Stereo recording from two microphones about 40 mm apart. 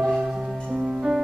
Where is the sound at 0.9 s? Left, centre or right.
Centre.